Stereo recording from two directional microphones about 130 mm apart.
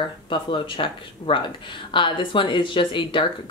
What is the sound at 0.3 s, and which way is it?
Speech, 40° left (ahead or behind).